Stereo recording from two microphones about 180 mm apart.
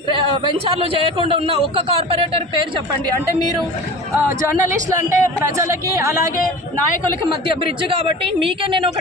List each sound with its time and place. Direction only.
0.8 s a man's voice: 30° right (ahead or behind)
4.4 s a woman's voice: 15° right (ahead or behind)
7.4 s speech: 30° right (ahead or behind)